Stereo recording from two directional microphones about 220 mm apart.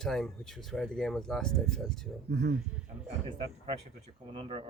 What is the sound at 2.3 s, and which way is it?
Speech, 50° right (ahead or behind).